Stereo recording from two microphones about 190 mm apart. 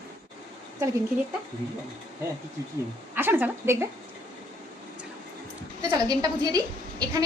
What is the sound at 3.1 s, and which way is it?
Speech, 10° right (ahead or behind).